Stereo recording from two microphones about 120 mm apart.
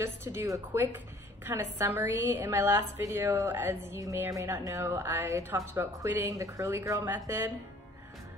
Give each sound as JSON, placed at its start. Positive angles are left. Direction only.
{"t": 0.0, "sound": "speech", "side_deg": -20}